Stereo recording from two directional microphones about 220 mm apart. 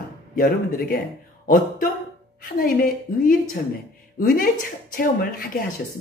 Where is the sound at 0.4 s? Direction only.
40° left (ahead or behind).